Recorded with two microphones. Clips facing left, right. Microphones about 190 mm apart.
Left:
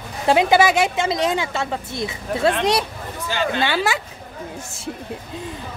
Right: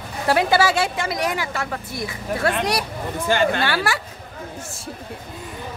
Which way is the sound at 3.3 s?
55° right (ahead or behind).